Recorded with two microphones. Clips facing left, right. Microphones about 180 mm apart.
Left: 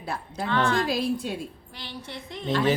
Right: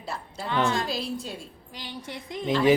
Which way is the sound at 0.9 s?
55° left (ahead or behind).